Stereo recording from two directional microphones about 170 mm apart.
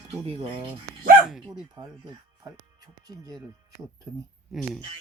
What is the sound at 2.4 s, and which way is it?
Speech, 20° right (ahead or behind).